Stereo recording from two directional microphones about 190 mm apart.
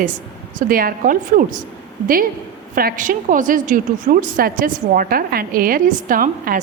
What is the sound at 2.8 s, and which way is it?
A woman's voice, 45° right (ahead or behind).